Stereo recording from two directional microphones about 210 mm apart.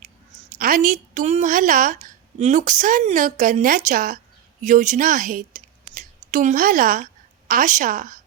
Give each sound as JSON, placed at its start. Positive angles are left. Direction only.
{"t": 0.6, "sound": "a woman's voice", "side_deg": -40}